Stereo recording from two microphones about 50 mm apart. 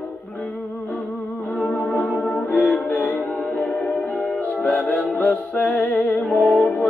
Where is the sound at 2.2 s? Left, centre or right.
Left.